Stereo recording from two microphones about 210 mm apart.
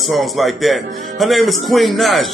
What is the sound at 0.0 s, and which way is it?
A man's voice, centre (ahead or behind).